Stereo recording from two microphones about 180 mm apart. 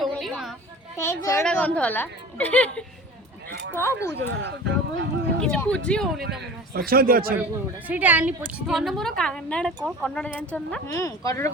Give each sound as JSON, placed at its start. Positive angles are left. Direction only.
{"t": 0.0, "sound": "chatter", "side_deg": 0}
{"t": 0.9, "sound": "a woman's voice", "side_deg": 15}
{"t": 4.1, "sound": "speech", "side_deg": -85}
{"t": 5.4, "sound": "a woman's voice", "side_deg": 5}
{"t": 6.7, "sound": "a man's voice", "side_deg": -55}
{"t": 7.9, "sound": "a woman's voice", "side_deg": -10}
{"t": 10.8, "sound": "a woman's voice", "side_deg": 20}